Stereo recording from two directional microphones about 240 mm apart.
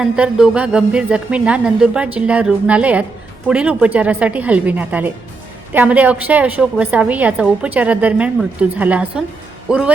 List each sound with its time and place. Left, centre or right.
0.0 s a woman's voice: centre